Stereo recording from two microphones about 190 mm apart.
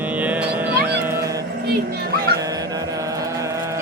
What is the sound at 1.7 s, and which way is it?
Speech, 55° right (ahead or behind).